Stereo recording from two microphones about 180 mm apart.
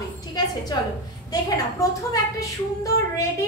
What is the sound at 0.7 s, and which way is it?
A woman's voice, 25° left (ahead or behind).